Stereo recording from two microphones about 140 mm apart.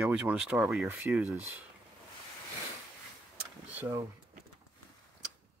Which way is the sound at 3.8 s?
20° right (ahead or behind).